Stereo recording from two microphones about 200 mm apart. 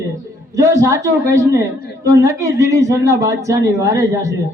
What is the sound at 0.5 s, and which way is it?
Speech, 15° right (ahead or behind).